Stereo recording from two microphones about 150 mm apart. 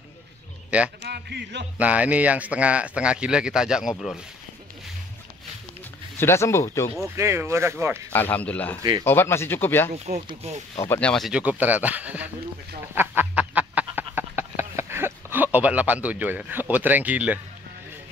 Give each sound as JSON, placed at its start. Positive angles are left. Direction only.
{"t": 0.7, "sound": "a man's voice", "side_deg": -10}
{"t": 1.0, "sound": "a man's voice", "side_deg": -90}
{"t": 1.8, "sound": "speech", "side_deg": -10}
{"t": 6.1, "sound": "speech", "side_deg": 15}
{"t": 7.2, "sound": "speech", "side_deg": -20}
{"t": 8.1, "sound": "speech", "side_deg": 10}
{"t": 9.9, "sound": "speech", "side_deg": -50}
{"t": 10.8, "sound": "speech", "side_deg": 10}
{"t": 12.9, "sound": "a sound", "side_deg": -15}